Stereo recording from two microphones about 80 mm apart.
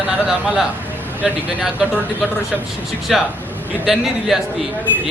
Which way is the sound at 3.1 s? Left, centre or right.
Centre.